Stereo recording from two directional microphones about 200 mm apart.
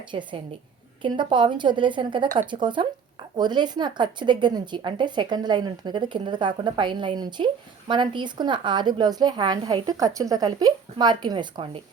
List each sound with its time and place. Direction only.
0.1 s speech: 25° right (ahead or behind)